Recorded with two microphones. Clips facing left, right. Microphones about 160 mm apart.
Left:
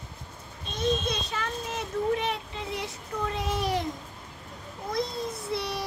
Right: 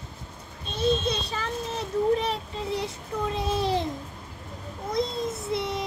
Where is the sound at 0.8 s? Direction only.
30° right (ahead or behind).